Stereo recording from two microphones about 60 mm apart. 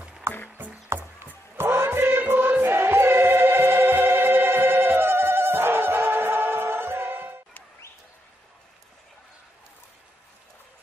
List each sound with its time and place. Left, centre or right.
0.3 s music: right
0.9 s music: right